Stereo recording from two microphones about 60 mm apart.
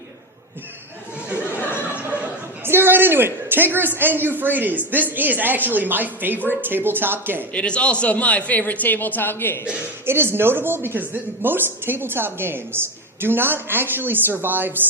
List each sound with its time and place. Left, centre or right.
2.0 s a man's voice: right
7.5 s a woman's voice: centre; by 9.6 s left
10.1 s speech: right